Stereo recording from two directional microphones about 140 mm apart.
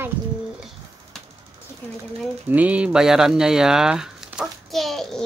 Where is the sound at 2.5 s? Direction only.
10° right (ahead or behind).